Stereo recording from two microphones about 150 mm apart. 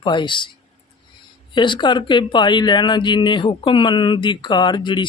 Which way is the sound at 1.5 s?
30° left (ahead or behind).